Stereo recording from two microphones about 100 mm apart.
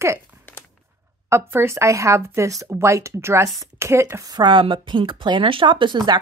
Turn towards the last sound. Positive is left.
turn(degrees=-50)  # may be behind; listen again after turning